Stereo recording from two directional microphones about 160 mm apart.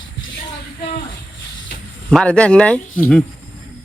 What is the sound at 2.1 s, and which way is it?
Speech, 5° left (ahead or behind).